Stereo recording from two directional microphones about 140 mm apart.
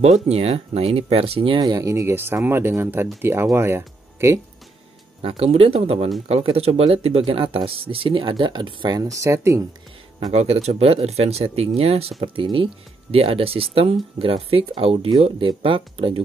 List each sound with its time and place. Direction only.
0.0 s speech: 50° right (ahead or behind)
1.6 s speech: 25° right (ahead or behind)
5.2 s speech: 45° right (ahead or behind); by 9.7 s 20° right (ahead or behind)
10.3 s speech: 50° right (ahead or behind)